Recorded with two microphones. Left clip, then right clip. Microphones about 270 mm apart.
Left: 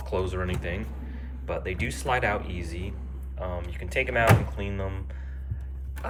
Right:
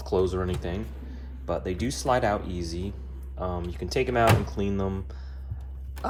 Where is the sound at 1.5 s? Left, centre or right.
Centre.